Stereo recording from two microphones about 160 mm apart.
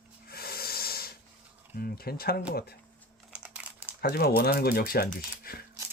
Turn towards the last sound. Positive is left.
turn(degrees=70)  # may be behind; listen again after turning